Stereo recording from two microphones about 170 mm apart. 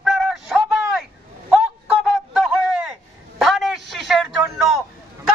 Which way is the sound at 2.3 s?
Centre (ahead or behind).